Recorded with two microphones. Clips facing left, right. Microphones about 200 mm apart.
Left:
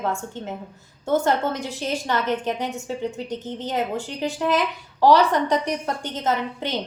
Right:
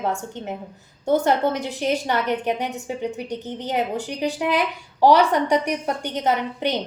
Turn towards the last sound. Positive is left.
turn(degrees=-15)  # may be behind; listen again after turning